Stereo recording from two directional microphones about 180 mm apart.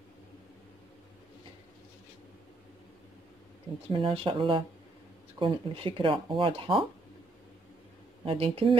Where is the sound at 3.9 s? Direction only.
30° right (ahead or behind).